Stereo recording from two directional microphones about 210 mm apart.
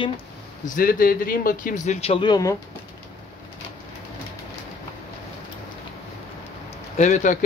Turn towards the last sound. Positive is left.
turn(degrees=35)  # may be behind; listen again after turning